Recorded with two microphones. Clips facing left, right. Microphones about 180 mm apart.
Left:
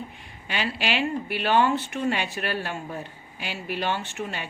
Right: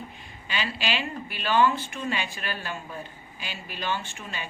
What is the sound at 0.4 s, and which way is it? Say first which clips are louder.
A woman's voice: left 2 dB; 60° left (ahead or behind).